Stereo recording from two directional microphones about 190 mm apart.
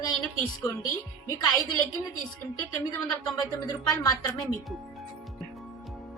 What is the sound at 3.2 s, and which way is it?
Speech, 20° left (ahead or behind).